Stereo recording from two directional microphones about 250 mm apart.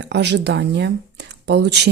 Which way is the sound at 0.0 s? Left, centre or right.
Right.